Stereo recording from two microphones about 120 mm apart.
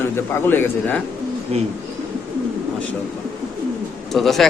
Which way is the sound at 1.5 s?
55° right (ahead or behind).